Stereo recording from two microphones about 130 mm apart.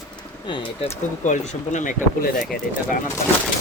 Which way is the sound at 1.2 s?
70° left (ahead or behind).